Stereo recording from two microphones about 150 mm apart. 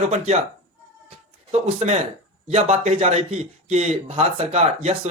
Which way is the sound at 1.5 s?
45° right (ahead or behind).